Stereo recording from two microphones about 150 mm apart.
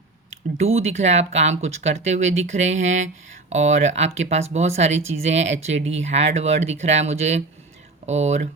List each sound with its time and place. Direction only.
0.6 s speech: 45° right (ahead or behind)